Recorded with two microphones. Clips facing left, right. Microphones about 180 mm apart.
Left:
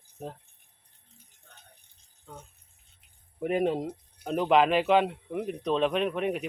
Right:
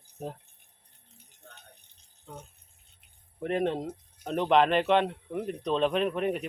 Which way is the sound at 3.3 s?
5° left (ahead or behind).